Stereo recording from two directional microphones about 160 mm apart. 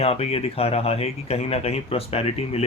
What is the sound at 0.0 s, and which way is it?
Speech, 40° left (ahead or behind).